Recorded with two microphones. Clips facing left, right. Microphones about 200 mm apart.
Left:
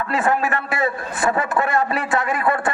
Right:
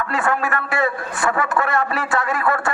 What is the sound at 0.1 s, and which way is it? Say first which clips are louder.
A man's voice: left 3 dB; 20° left (ahead or behind).